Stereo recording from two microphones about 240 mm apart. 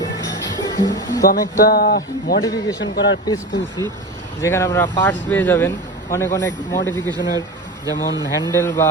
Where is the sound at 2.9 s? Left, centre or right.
Left.